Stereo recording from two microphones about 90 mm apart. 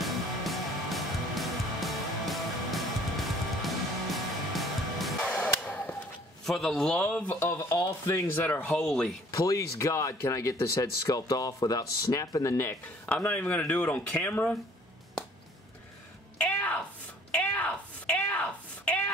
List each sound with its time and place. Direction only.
0.0 s music: centre (ahead or behind)
5.2 s a sound: 15° left (ahead or behind)
6.4 s speech: 5° left (ahead or behind)
7.5 s speech: 40° left (ahead or behind)
8.6 s speech: 5° left (ahead or behind)
9.3 s speech: 35° left (ahead or behind)
13.1 s speech: 15° left (ahead or behind)
16.3 s music: 15° left (ahead or behind)
17.3 s a sound: 15° left (ahead or behind)